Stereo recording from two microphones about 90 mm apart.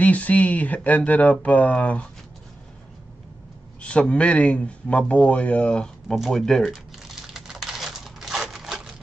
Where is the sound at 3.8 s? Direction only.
15° left (ahead or behind).